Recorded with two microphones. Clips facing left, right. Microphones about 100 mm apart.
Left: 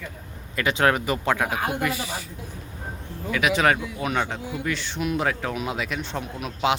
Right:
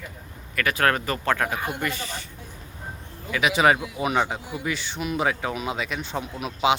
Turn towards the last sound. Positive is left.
turn(degrees=-5)  # may be behind; listen again after turning